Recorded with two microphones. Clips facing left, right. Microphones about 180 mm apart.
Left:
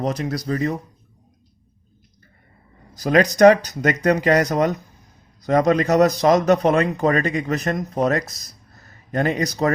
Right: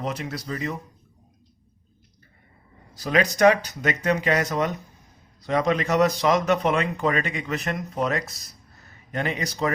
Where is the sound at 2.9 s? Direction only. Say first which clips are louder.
Left 6 dB; 40° left (ahead or behind).